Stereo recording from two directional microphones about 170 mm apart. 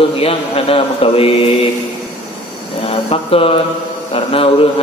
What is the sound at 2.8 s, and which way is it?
Speech, 35° left (ahead or behind).